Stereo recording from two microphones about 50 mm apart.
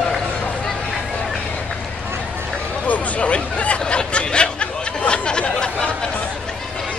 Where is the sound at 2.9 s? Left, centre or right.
Left.